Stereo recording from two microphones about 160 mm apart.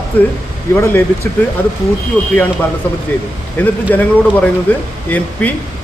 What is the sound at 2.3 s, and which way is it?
Speech, 10° left (ahead or behind).